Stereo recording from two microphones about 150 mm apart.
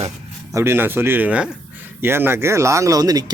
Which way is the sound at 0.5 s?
15° right (ahead or behind).